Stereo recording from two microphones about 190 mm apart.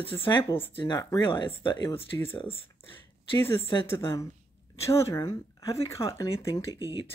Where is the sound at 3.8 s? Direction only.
15° left (ahead or behind).